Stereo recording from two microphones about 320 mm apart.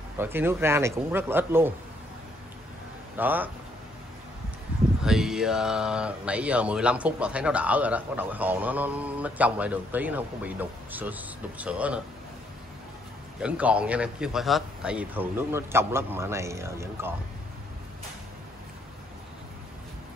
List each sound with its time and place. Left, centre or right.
0.2 s a man's voice: centre
3.2 s speech: centre
5.0 s speech: centre
13.4 s a man's voice: centre